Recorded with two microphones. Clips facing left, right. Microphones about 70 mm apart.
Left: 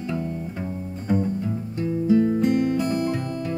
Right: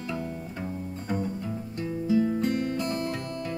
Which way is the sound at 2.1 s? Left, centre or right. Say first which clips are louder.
Left 5 dB; left.